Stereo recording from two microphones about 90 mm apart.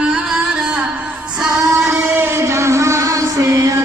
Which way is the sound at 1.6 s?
35° right (ahead or behind).